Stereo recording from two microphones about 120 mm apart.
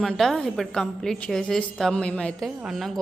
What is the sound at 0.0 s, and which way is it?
A woman's voice, 5° left (ahead or behind).